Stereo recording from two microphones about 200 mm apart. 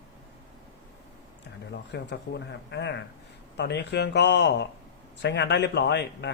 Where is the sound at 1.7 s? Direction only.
60° left (ahead or behind).